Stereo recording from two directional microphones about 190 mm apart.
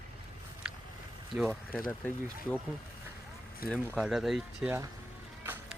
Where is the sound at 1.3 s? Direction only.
Centre (ahead or behind).